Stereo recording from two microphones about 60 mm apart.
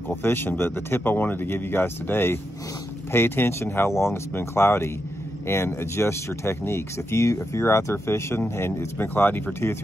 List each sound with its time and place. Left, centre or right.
0.1 s speech: left
9.0 s speech: left